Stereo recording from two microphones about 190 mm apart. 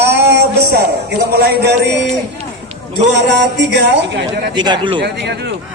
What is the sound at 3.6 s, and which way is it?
Speech, 65° right (ahead or behind).